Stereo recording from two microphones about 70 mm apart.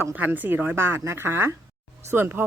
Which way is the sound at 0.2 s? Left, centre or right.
Right.